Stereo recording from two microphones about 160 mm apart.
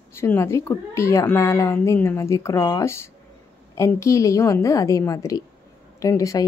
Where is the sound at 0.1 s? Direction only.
15° left (ahead or behind).